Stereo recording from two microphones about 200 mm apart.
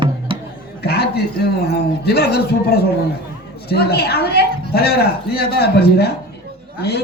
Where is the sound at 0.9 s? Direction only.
55° left (ahead or behind).